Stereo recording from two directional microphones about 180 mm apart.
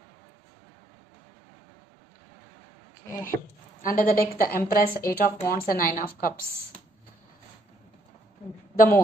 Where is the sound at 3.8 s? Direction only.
50° left (ahead or behind).